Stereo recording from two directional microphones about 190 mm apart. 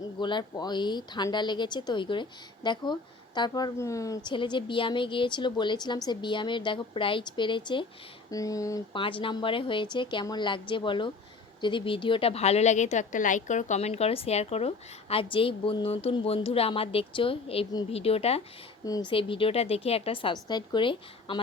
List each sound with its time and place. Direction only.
0.2 s a woman's voice: 25° left (ahead or behind)
18.9 s a woman's voice: 20° left (ahead or behind)